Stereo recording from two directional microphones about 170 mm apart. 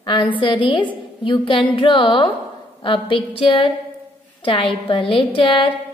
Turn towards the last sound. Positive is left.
turn(degrees=30)  # may be behind; listen again after turning